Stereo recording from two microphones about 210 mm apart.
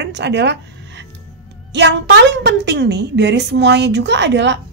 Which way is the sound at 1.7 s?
55° right (ahead or behind).